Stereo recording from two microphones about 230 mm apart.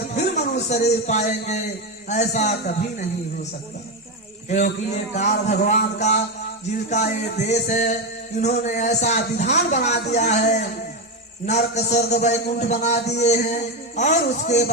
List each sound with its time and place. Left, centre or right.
0.2 s a sound: left
0.9 s a man's voice: left
4.4 s a man's voice: left